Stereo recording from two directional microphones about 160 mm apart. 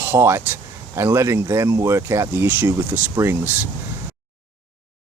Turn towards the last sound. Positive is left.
turn(degrees=-15)  # may be behind; listen again after turning